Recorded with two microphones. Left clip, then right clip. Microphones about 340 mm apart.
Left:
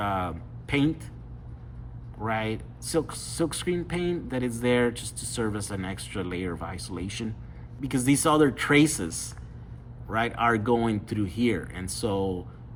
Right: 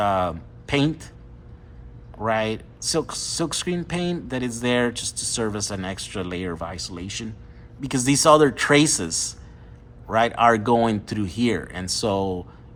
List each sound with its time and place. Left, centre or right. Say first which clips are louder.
0.0 s speech: right 7 dB; centre
2.2 s speech: right 6 dB; centre